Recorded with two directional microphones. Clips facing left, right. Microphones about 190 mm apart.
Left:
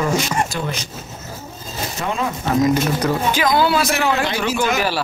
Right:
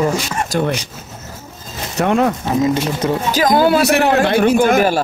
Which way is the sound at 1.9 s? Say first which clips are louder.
Right 9 dB; 65° right (ahead or behind).